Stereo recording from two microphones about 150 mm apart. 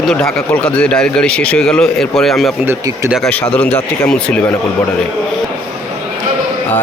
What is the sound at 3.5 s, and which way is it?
Speech, 10° left (ahead or behind).